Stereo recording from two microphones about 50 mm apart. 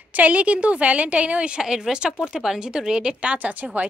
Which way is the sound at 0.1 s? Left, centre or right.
Right.